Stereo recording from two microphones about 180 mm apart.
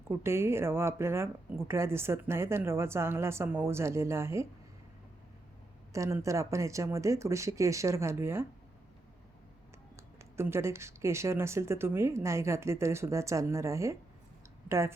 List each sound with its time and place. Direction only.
0.1 s speech: 15° right (ahead or behind)
5.9 s speech: 15° right (ahead or behind)
10.3 s speech: 15° right (ahead or behind)